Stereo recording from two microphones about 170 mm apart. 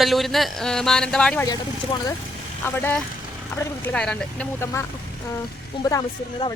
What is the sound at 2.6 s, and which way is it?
Speech, 10° left (ahead or behind).